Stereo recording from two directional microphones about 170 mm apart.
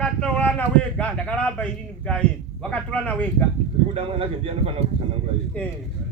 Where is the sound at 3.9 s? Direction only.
35° right (ahead or behind).